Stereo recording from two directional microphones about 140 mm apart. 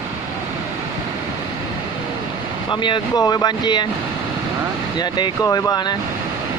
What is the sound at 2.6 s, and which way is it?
Speech, 35° left (ahead or behind).